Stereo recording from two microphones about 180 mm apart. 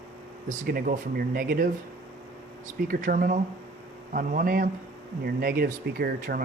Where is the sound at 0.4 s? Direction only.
45° right (ahead or behind).